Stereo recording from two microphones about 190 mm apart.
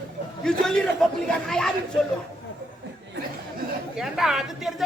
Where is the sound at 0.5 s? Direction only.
5° left (ahead or behind).